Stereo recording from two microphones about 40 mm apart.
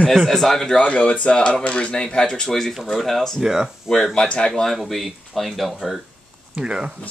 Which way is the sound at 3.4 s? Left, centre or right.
Centre.